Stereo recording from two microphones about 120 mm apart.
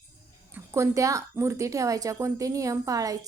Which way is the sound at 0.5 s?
25° right (ahead or behind).